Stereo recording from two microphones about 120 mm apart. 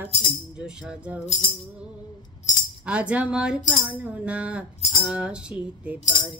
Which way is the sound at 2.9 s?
10° right (ahead or behind).